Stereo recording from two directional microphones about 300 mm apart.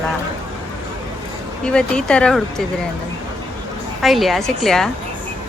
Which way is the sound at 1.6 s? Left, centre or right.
Centre.